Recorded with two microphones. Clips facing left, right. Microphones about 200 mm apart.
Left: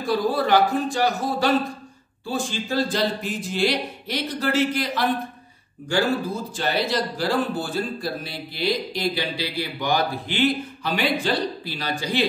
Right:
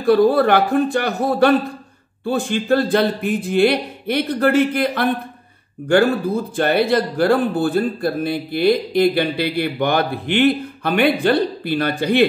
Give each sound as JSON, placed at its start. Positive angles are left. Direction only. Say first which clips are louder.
{"t": 0.0, "sound": "speech", "louder": "right 9 dB", "side_deg": -60}